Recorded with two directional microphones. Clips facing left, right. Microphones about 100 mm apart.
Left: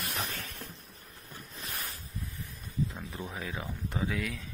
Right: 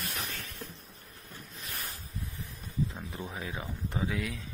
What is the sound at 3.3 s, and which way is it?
Speech, 25° right (ahead or behind).